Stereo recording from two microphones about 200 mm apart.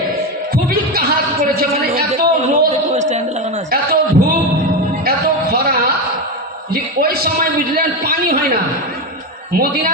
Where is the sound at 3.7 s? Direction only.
50° right (ahead or behind).